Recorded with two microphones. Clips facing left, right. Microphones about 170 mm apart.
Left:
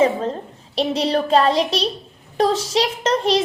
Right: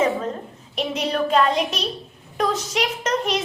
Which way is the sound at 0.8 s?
30° left (ahead or behind).